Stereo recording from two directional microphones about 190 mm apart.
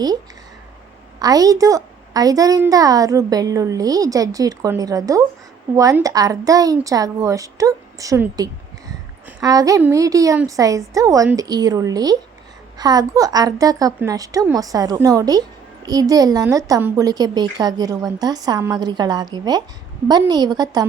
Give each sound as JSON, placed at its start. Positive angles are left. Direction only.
{"t": 1.2, "sound": "a woman's voice", "side_deg": -20}